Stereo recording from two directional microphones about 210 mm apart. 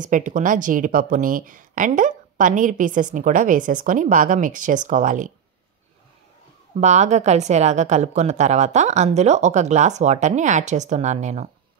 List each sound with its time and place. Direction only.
0.0 s speech: 35° right (ahead or behind)
6.7 s speech: 35° right (ahead or behind)